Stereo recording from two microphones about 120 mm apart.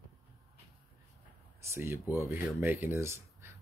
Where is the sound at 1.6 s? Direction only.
20° right (ahead or behind).